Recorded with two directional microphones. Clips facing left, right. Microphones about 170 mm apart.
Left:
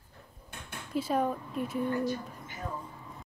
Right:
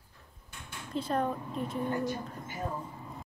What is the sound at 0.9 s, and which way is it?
Speech, 5° left (ahead or behind).